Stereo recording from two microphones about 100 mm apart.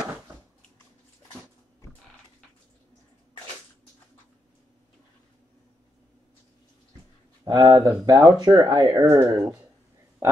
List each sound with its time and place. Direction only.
7.4 s speech: 40° right (ahead or behind)
8.8 s speech: 25° right (ahead or behind)